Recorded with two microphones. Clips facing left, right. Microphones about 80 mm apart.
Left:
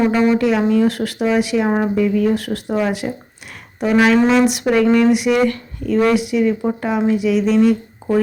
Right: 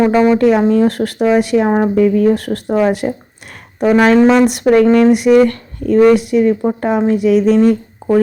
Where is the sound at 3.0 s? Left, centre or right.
Centre.